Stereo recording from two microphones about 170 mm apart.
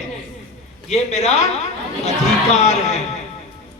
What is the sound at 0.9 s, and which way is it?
A man's voice, 40° left (ahead or behind).